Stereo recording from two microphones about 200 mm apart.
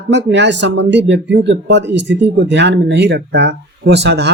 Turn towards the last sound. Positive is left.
turn(degrees=-55)  # may be behind; listen again after turning